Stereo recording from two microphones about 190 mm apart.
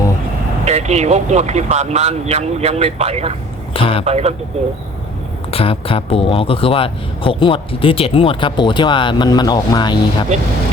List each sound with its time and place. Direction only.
0.6 s speech: 35° right (ahead or behind)
3.8 s speech: 30° left (ahead or behind)
4.0 s speech: 35° right (ahead or behind)
5.5 s speech: 30° left (ahead or behind)